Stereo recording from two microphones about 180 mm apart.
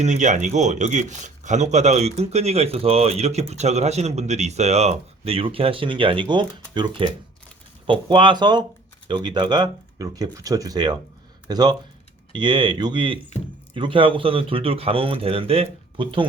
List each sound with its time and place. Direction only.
0.0 s speech: 40° right (ahead or behind)